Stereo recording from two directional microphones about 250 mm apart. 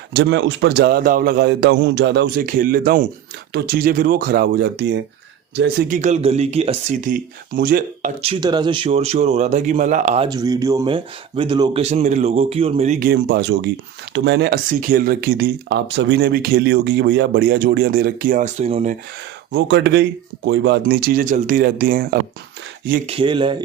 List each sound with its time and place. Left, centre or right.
0.1 s speech: right
10.2 s speech: centre
19.5 s speech: right
23.0 s speech: right